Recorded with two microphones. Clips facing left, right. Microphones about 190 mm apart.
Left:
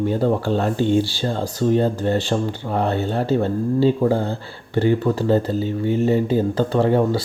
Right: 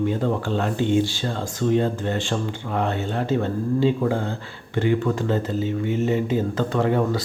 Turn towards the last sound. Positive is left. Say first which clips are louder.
# left 4 dB
turn(degrees=30)  # may be behind; listen again after turning